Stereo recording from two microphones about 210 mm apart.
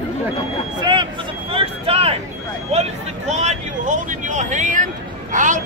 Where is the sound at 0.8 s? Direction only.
20° right (ahead or behind).